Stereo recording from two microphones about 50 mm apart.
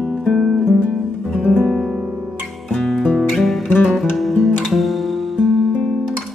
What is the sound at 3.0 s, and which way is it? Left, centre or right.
Music, centre.